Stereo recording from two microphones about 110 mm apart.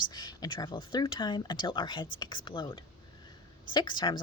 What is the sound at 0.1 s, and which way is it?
A woman's voice, 40° left (ahead or behind).